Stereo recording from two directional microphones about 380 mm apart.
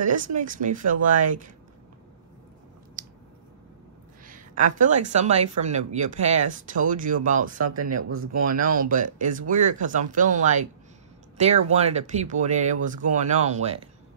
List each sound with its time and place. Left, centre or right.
0.0 s speech: centre
3.0 s a sound: right
4.3 s speech: centre
7.5 s speech: right
8.5 s speech: right
11.7 s speech: centre